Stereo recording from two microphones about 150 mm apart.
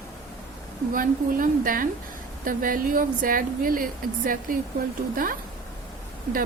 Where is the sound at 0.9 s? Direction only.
70° right (ahead or behind).